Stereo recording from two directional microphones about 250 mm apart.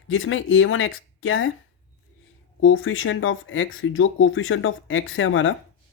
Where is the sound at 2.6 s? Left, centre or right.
Left.